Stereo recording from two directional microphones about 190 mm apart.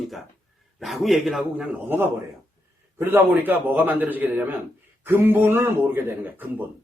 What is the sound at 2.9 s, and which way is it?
Speech, 10° right (ahead or behind).